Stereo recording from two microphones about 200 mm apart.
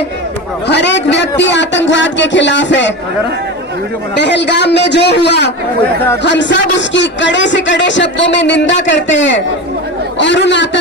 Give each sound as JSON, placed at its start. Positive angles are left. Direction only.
{"t": 0.7, "sound": "a man's voice", "side_deg": 60}
{"t": 4.2, "sound": "a man's voice", "side_deg": 60}